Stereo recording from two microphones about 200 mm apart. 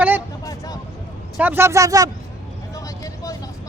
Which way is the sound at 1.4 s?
10° right (ahead or behind).